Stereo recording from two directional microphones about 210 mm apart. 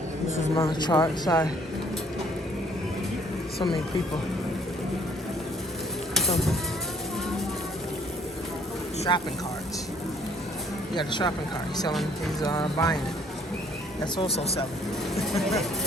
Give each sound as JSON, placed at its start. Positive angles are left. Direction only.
{"t": 0.5, "sound": "speech", "side_deg": 25}
{"t": 9.1, "sound": "speech", "side_deg": 20}
{"t": 10.9, "sound": "speech", "side_deg": 20}
{"t": 12.4, "sound": "speech", "side_deg": 15}
{"t": 14.0, "sound": "speech", "side_deg": 25}
{"t": 15.1, "sound": "speech", "side_deg": 0}